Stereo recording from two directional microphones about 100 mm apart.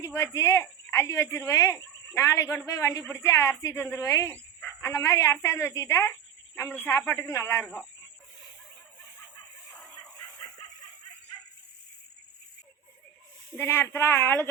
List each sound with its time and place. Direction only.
0.0 s a woman's voice: 30° left (ahead or behind)
13.6 s a woman's voice: 25° left (ahead or behind)